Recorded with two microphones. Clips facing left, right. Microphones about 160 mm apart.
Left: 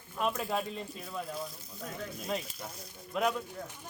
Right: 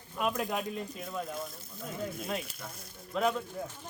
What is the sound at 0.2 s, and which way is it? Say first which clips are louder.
Speech: right 1 dB; 5° right (ahead or behind).